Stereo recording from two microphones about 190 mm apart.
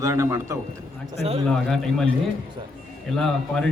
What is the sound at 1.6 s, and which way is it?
Speech, centre (ahead or behind).